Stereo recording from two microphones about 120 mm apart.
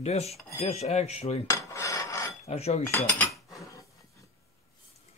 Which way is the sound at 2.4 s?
60° left (ahead or behind).